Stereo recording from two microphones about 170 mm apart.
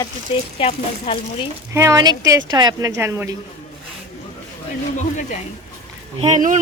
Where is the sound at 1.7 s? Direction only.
15° right (ahead or behind).